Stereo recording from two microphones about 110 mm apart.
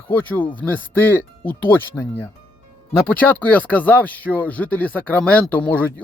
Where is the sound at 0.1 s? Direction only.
15° left (ahead or behind).